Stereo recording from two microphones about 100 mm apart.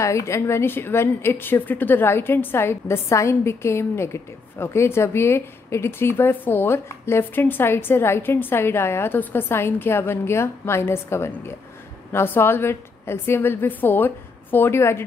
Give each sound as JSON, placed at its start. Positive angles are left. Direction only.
{"t": 0.0, "sound": "a woman's voice", "side_deg": 30}